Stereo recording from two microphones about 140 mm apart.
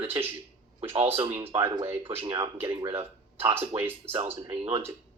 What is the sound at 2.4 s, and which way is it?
Speech, 20° right (ahead or behind).